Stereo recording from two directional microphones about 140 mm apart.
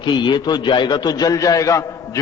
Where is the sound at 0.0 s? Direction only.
35° left (ahead or behind).